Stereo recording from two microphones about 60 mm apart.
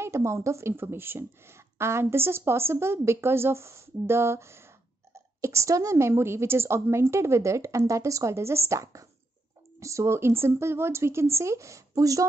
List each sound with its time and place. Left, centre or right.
0.0 s a woman's voice: right